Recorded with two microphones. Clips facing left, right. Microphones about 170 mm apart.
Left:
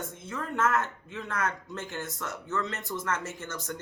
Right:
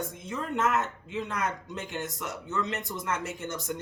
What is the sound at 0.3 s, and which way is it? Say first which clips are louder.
A man's voice: even; 20° right (ahead or behind).